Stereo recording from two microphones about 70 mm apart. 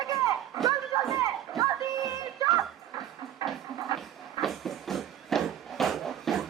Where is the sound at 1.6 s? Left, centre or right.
Right.